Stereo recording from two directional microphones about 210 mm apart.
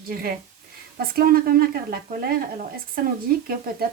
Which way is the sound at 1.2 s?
45° right (ahead or behind).